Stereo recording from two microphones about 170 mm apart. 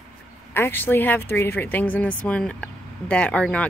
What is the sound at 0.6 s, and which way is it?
Speech, 15° left (ahead or behind).